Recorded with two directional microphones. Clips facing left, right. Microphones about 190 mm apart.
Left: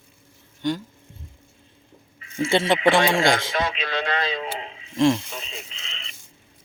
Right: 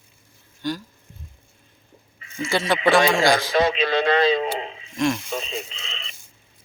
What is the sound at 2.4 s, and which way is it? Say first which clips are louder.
Speech: left 2 dB; 25° left (ahead or behind).